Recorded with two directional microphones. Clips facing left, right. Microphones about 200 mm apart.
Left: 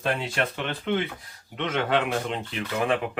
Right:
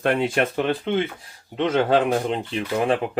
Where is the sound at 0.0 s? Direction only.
55° right (ahead or behind).